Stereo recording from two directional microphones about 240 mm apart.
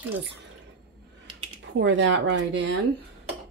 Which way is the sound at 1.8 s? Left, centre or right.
Right.